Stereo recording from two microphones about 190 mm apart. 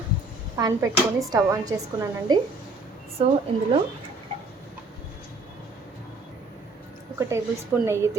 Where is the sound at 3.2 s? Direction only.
30° right (ahead or behind).